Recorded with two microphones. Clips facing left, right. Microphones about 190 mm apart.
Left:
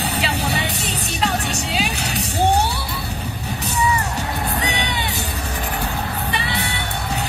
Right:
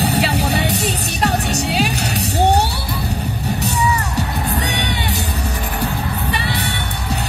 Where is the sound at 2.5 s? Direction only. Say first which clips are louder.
Right 2 dB; 65° right (ahead or behind).